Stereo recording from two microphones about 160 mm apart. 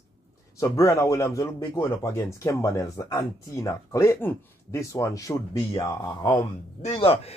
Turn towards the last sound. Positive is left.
turn(degrees=35)  # may be behind; listen again after turning